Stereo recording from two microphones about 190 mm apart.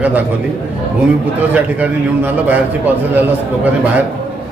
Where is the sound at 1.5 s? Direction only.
10° right (ahead or behind).